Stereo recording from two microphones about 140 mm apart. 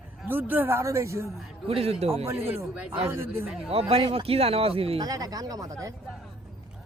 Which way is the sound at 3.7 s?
45° right (ahead or behind).